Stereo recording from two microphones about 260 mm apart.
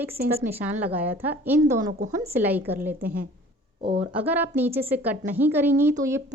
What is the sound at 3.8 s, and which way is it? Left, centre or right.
Speech, right.